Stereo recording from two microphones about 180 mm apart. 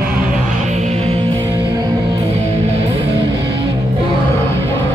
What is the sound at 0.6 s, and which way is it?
Music, 40° right (ahead or behind).